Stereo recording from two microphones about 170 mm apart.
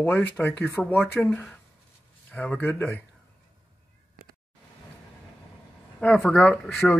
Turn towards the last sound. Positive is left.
turn(degrees=5)  # may be behind; listen again after turning